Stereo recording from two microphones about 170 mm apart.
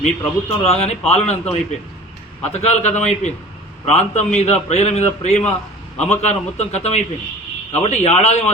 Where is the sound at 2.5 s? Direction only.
40° left (ahead or behind).